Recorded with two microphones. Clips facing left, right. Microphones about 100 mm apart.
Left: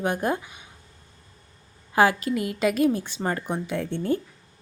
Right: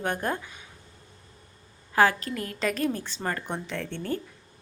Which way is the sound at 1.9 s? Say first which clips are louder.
Left 2 dB; 15° left (ahead or behind).